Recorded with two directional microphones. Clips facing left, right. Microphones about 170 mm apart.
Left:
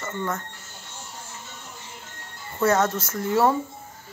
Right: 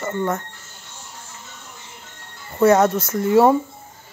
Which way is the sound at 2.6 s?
15° right (ahead or behind).